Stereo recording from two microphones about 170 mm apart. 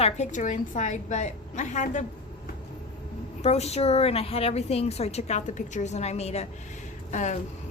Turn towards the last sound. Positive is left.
turn(degrees=45)  # may be behind; listen again after turning